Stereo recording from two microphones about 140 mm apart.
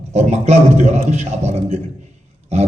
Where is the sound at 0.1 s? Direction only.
50° right (ahead or behind).